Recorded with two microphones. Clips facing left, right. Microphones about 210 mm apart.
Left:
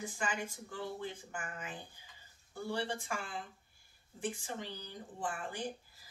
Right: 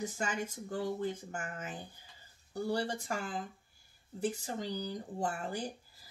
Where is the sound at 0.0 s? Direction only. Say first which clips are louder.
Right 3 dB; 45° right (ahead or behind).